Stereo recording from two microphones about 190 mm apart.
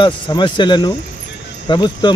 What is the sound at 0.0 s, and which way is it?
Speech, 25° left (ahead or behind).